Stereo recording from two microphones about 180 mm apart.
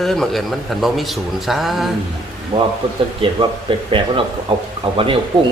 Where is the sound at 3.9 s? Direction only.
30° right (ahead or behind).